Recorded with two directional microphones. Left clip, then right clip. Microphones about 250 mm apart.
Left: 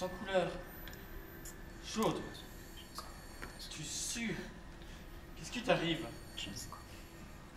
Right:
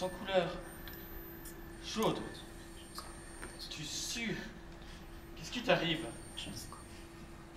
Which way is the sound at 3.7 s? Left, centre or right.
Centre.